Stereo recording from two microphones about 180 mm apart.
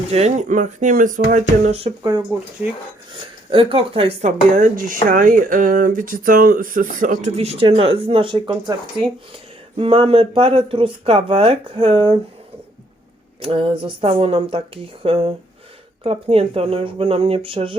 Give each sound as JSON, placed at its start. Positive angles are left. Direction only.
{"t": 0.1, "sound": "speech", "side_deg": -40}
{"t": 3.5, "sound": "speech", "side_deg": -30}
{"t": 4.5, "sound": "speech", "side_deg": -50}
{"t": 7.3, "sound": "speech", "side_deg": -35}
{"t": 9.7, "sound": "speech", "side_deg": -30}
{"t": 13.4, "sound": "speech", "side_deg": -30}